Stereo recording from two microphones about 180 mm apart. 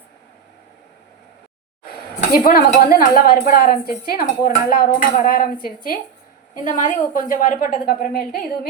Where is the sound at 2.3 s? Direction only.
55° left (ahead or behind).